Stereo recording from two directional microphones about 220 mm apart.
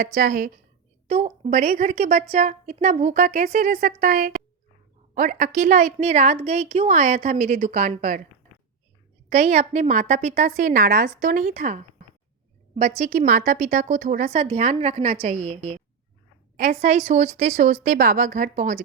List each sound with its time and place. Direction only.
0.0 s a woman's voice: 40° right (ahead or behind)
1.0 s a woman's voice: 25° right (ahead or behind)
9.3 s a woman's voice: 30° right (ahead or behind)
13.1 s a woman's voice: 35° right (ahead or behind)
17.1 s a woman's voice: 30° right (ahead or behind)